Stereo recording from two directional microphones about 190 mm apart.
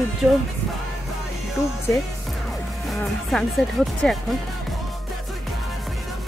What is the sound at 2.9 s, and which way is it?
Speech, centre (ahead or behind).